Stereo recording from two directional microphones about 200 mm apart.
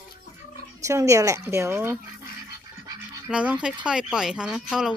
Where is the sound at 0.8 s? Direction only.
15° right (ahead or behind).